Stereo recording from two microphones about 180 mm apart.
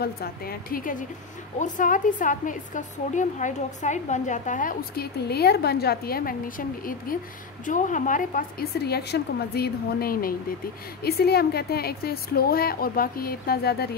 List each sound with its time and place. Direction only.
0.0 s a woman's voice: 60° left (ahead or behind)